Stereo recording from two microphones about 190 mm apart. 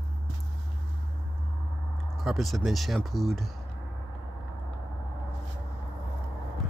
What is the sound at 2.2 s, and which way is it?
Speech, centre (ahead or behind).